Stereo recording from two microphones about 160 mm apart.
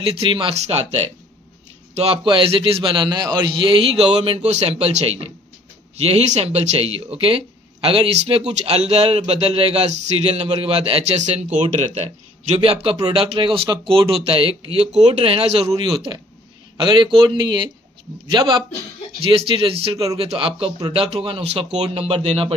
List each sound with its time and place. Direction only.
0.1 s a man's voice: 35° right (ahead or behind)